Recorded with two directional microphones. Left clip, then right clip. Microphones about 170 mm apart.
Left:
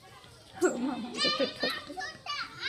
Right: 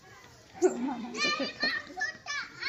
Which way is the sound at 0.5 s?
30° left (ahead or behind).